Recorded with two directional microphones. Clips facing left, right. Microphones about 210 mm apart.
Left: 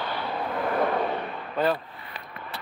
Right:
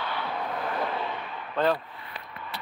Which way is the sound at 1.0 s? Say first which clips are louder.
Left 6 dB; 40° left (ahead or behind).